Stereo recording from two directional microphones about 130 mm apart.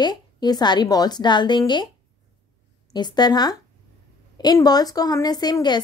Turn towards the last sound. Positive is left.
turn(degrees=35)  # may be behind; listen again after turning